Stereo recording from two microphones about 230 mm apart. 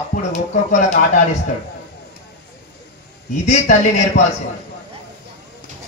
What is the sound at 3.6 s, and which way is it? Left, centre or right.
Speech, left.